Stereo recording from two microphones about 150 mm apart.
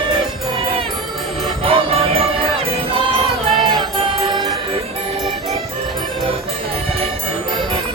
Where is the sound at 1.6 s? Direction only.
40° right (ahead or behind).